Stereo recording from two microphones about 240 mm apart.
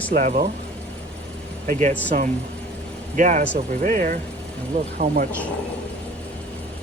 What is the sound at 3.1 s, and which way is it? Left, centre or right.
Speech, right.